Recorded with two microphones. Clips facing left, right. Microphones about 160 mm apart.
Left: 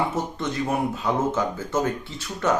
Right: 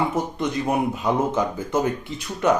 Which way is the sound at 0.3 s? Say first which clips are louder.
Right 3 dB; 15° right (ahead or behind).